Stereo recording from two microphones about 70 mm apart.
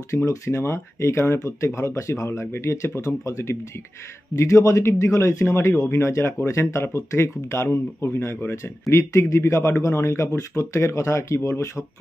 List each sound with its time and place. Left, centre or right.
0.1 s speech: left